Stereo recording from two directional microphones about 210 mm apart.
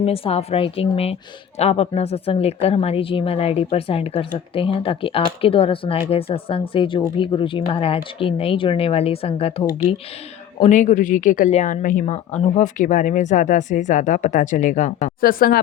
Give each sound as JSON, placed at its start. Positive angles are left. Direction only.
{"t": 0.0, "sound": "a woman's voice", "side_deg": 30}